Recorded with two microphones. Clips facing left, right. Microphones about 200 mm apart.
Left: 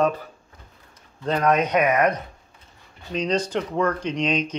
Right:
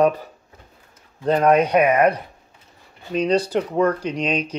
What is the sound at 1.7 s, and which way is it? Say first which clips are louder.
Speech: right 4 dB; 30° right (ahead or behind).